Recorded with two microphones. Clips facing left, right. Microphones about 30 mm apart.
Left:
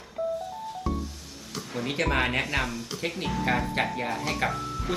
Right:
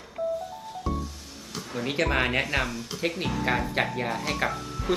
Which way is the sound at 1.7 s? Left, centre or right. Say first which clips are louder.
Right 1 dB; centre.